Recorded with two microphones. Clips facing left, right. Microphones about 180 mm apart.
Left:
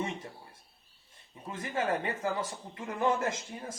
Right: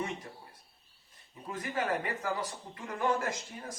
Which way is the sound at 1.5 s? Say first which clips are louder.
Left 1 dB; 25° left (ahead or behind).